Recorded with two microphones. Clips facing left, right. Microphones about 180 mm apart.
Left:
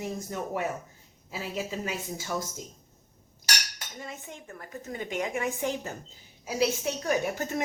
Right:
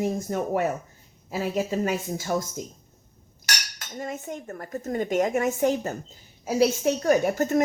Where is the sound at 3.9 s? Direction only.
45° right (ahead or behind).